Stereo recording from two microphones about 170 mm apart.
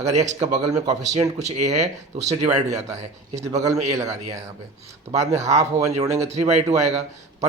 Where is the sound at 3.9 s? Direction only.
20° right (ahead or behind).